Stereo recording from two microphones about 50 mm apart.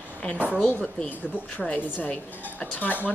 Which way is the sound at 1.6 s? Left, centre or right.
Centre.